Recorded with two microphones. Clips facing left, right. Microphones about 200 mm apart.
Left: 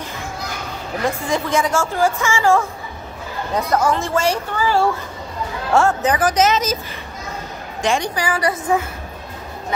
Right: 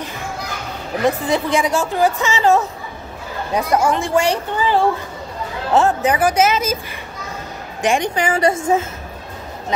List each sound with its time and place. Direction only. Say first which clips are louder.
1.2 s speech: right 2 dB; 15° right (ahead or behind)
7.8 s speech: right 2 dB; 20° right (ahead or behind)